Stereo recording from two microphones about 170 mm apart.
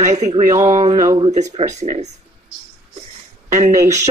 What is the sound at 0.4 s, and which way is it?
Speech, 45° right (ahead or behind).